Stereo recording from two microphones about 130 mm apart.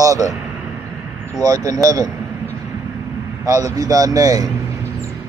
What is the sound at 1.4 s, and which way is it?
Speech, 25° right (ahead or behind).